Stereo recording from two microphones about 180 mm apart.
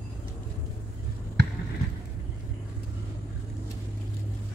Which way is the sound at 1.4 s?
65° right (ahead or behind).